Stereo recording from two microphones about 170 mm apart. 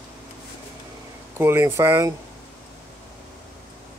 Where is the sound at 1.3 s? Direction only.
15° right (ahead or behind).